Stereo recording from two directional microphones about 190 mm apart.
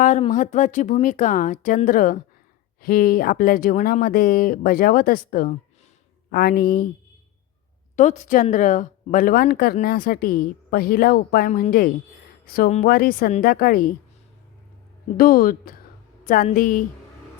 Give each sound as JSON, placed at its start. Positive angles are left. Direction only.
{"t": 0.0, "sound": "a woman's voice", "side_deg": 40}
{"t": 7.9, "sound": "a woman's voice", "side_deg": 40}
{"t": 15.2, "sound": "speech", "side_deg": 50}